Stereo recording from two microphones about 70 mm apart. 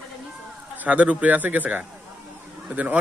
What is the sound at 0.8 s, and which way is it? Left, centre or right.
Speech, centre.